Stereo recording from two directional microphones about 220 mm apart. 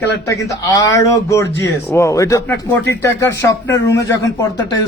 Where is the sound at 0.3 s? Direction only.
15° left (ahead or behind).